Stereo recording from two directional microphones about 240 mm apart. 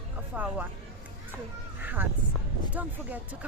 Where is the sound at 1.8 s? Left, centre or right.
Centre.